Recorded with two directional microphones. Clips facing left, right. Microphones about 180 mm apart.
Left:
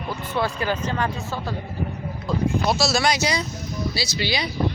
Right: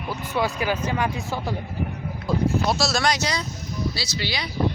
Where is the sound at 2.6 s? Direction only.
Centre (ahead or behind).